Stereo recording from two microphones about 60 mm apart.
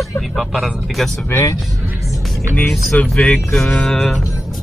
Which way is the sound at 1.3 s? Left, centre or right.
Left.